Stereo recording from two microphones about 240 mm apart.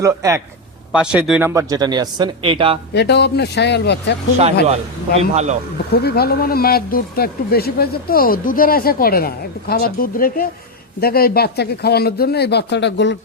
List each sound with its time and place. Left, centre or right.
0.0 s speech: centre
2.9 s speech: left
5.3 s speech: right
5.9 s speech: left